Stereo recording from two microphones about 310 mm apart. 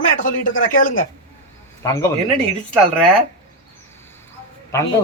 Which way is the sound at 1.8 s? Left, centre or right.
Centre.